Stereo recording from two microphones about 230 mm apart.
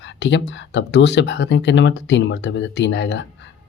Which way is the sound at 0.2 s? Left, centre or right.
Left.